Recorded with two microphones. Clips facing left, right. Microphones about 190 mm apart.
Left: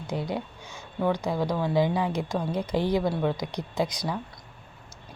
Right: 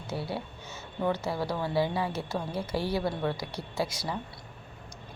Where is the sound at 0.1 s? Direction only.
15° left (ahead or behind).